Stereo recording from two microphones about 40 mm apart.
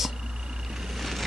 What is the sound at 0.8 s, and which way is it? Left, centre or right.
Vehicle, centre.